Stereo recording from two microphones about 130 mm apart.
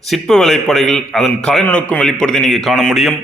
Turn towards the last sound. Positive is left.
turn(degrees=0)  # may be behind; listen again after turning